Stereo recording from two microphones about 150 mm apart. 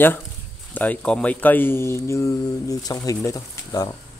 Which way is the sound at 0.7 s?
10° left (ahead or behind).